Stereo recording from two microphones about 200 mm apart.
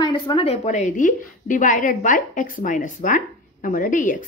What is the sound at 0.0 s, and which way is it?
A woman's voice, 25° left (ahead or behind).